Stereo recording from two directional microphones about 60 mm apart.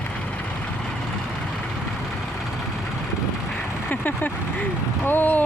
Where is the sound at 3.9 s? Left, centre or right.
Left.